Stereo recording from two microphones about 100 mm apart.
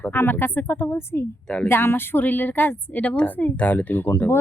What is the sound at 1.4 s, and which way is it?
Speech, 10° left (ahead or behind).